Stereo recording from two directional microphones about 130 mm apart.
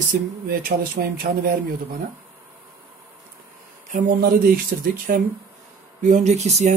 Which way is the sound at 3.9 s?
90° right.